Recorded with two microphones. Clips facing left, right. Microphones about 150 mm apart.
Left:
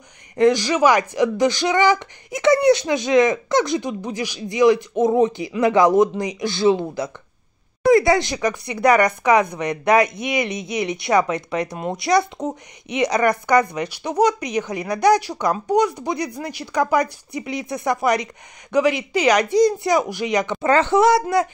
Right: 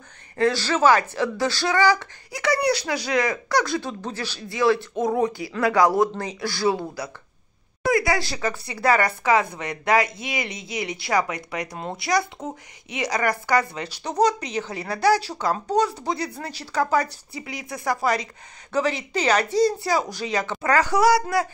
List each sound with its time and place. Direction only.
0.4 s speech: 15° left (ahead or behind)